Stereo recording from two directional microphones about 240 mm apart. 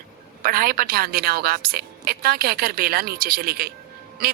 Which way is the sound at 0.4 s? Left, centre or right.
Right.